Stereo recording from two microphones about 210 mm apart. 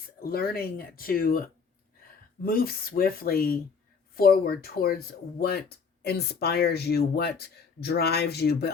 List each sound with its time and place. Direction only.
0.3 s speech: 45° left (ahead or behind)